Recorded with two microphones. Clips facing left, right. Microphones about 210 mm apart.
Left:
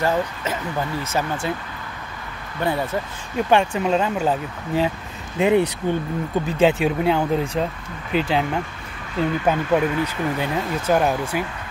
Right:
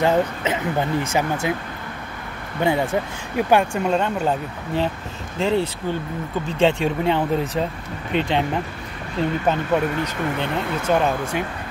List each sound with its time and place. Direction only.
0.0 s speech: 20° right (ahead or behind)
2.6 s speech: 15° right (ahead or behind); by 4.9 s 5° left (ahead or behind)
5.4 s speech: 15° left (ahead or behind)
6.6 s speech: 5° left (ahead or behind)